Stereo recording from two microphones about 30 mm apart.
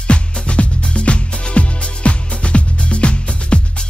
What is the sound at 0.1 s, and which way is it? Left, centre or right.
Music, left.